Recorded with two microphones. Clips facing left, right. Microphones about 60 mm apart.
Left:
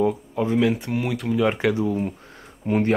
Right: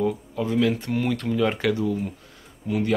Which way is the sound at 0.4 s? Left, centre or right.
Left.